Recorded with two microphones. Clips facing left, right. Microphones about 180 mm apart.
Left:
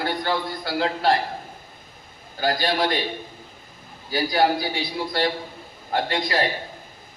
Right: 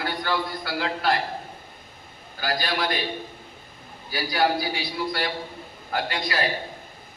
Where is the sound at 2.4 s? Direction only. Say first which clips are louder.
Left 5 dB; 30° left (ahead or behind).